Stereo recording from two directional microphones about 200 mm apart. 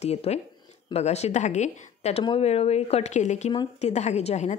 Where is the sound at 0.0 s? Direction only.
30° left (ahead or behind).